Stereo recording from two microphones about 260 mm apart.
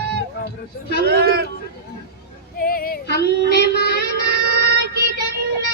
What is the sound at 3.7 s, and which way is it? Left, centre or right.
Speech, left.